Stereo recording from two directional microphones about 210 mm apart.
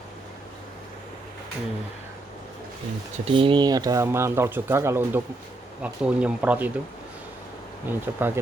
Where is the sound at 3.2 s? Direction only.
25° right (ahead or behind); by 6.7 s 5° right (ahead or behind).